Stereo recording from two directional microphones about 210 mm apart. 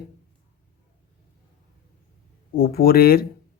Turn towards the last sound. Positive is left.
turn(degrees=45)  # may be behind; listen again after turning